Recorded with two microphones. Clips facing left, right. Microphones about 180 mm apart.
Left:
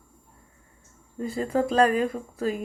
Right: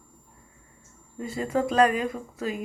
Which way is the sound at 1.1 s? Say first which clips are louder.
Left 2 dB; 35° left (ahead or behind).